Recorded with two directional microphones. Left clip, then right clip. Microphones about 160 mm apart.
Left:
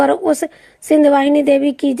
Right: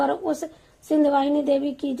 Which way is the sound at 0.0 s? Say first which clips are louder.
Left 10 dB; 45° left (ahead or behind).